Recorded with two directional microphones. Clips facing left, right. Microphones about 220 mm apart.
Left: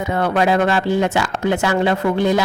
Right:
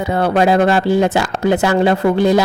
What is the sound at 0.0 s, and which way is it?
Speech, 35° right (ahead or behind).